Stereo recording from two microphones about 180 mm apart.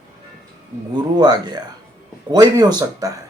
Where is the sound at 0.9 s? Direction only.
20° right (ahead or behind).